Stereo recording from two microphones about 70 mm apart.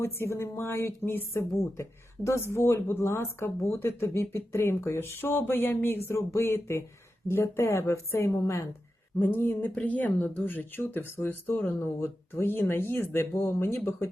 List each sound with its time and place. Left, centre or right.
0.0 s speech: left
9.1 s speech: left